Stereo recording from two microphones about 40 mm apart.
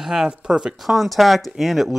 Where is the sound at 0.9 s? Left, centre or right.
Centre.